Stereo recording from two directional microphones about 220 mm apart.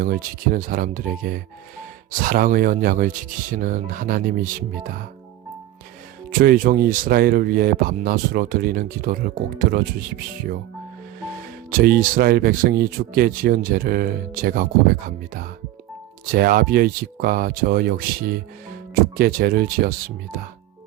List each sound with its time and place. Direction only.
0.0 s speech: 40° right (ahead or behind)
6.4 s speech: 40° right (ahead or behind)
11.7 s speech: 40° right (ahead or behind)